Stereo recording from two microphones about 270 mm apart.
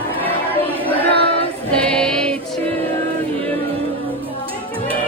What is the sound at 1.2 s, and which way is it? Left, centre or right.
Choir, left.